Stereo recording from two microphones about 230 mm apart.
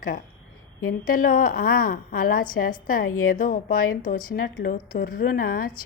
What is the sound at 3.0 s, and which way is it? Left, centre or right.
Speech, left.